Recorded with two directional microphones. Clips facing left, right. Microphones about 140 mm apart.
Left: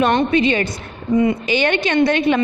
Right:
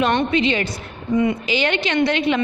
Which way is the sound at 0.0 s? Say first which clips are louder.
Left 3 dB; 40° left (ahead or behind).